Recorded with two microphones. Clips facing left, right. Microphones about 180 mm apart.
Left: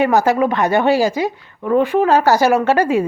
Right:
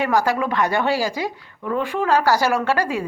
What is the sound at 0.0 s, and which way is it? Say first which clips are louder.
Speech: left 6 dB; 20° left (ahead or behind).